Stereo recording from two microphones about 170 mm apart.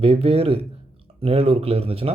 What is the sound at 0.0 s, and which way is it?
Speech, 35° right (ahead or behind).